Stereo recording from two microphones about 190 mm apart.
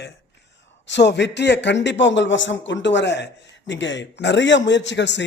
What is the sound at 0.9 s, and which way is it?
Speech, 70° left (ahead or behind).